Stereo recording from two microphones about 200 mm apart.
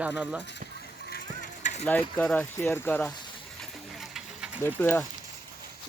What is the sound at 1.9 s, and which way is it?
Speech, 5° left (ahead or behind).